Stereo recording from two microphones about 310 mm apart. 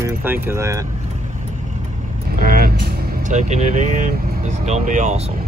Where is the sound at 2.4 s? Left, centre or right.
Right.